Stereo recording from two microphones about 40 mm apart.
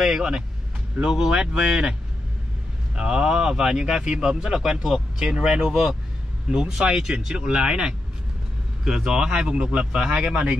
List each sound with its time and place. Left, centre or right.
0.0 s speech: centre
3.0 s speech: centre